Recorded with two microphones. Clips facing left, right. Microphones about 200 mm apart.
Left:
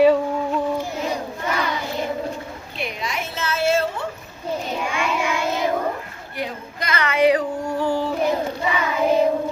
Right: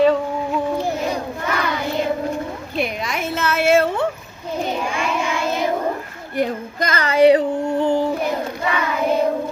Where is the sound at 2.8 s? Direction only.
50° right (ahead or behind).